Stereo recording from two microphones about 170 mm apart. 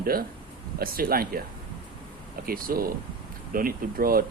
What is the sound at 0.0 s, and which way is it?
Speech, 60° right (ahead or behind).